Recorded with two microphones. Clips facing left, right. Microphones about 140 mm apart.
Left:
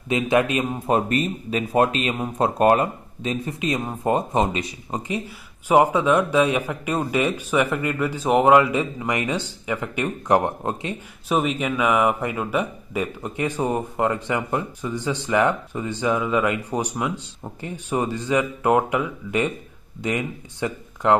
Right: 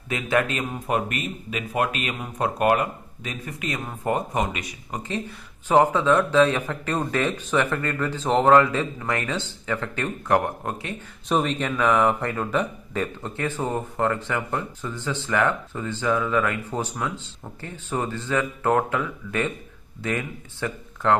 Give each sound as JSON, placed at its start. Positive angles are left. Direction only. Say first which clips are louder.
{"t": 0.1, "sound": "speech", "louder": "left 4 dB", "side_deg": 20}
{"t": 5.7, "sound": "speech", "louder": "left 1 dB", "side_deg": 10}
{"t": 11.2, "sound": "speech", "louder": "left 1 dB", "side_deg": 5}